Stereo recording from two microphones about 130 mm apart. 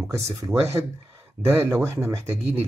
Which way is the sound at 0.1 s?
25° right (ahead or behind).